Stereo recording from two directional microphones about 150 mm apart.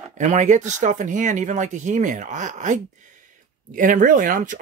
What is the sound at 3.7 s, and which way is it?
Speech, 60° right (ahead or behind).